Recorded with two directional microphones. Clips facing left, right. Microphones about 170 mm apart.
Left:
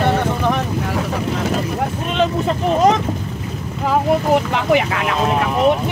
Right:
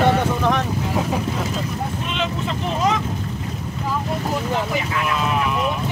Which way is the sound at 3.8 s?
75° left (ahead or behind).